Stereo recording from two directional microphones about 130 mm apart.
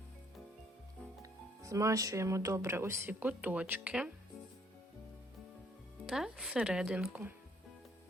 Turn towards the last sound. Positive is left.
turn(degrees=-10)  # may be behind; listen again after turning